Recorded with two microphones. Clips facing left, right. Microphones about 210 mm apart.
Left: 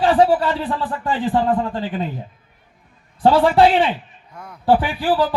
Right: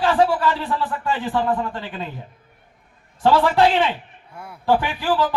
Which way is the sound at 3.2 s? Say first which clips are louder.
Left 3 dB; 35° left (ahead or behind).